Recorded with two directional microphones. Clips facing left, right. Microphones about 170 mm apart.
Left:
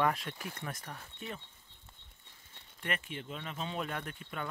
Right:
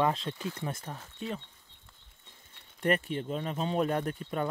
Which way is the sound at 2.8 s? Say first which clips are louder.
Right 10 dB; 40° right (ahead or behind).